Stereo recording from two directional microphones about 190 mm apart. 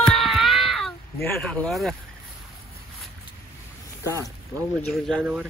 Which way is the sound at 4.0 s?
15° right (ahead or behind).